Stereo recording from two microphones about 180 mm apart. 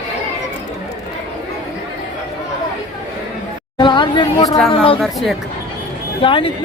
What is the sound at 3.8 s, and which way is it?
Speech, 25° left (ahead or behind).